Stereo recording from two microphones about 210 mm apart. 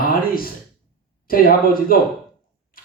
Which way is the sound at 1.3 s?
45° left (ahead or behind).